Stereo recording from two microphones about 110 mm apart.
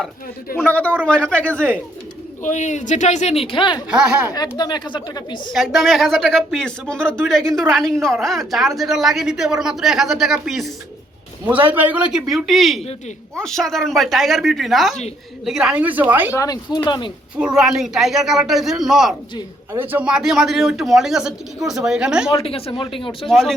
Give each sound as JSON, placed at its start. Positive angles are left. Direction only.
{"t": 0.7, "sound": "a man's voice", "side_deg": 15}
{"t": 2.5, "sound": "speech", "side_deg": 90}
{"t": 3.8, "sound": "a woman's voice", "side_deg": -10}
{"t": 4.5, "sound": "speech", "side_deg": 40}
{"t": 5.5, "sound": "a woman's voice", "side_deg": 0}
{"t": 11.6, "sound": "a woman's voice", "side_deg": -15}
{"t": 12.3, "sound": "a woman's voice", "side_deg": 0}
{"t": 16.3, "sound": "speech", "side_deg": 30}
{"t": 17.3, "sound": "a woman's voice", "side_deg": -5}
{"t": 19.7, "sound": "a woman's voice", "side_deg": -15}
{"t": 22.3, "sound": "speech", "side_deg": 60}
{"t": 23.3, "sound": "a woman's voice", "side_deg": 0}